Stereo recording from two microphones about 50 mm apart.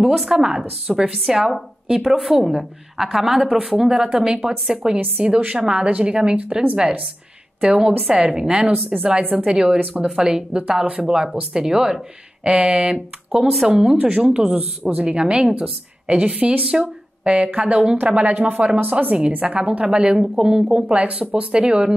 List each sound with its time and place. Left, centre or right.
0.0 s speech: centre
0.8 s a woman's voice: centre
9.5 s a woman's voice: centre
13.3 s a woman's voice: centre
20.9 s a woman's voice: right